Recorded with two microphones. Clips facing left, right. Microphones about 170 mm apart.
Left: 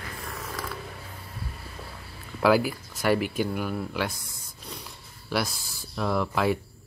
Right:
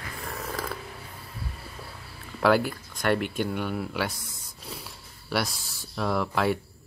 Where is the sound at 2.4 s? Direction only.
5° left (ahead or behind).